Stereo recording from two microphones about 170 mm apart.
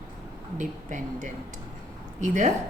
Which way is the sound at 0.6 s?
45° right (ahead or behind).